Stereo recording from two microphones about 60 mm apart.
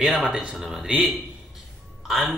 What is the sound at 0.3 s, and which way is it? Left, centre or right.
Speech, centre.